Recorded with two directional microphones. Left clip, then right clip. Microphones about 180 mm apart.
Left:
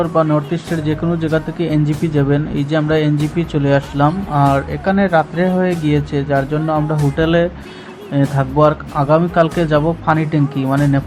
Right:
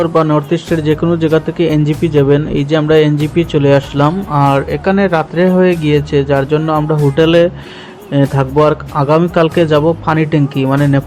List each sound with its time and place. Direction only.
0.0 s speech: 30° right (ahead or behind)